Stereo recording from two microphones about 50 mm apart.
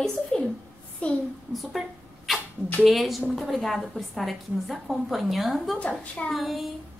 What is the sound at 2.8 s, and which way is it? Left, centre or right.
A woman's voice, centre.